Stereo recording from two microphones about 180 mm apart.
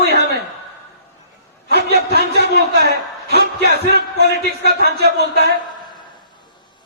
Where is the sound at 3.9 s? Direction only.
65° left (ahead or behind).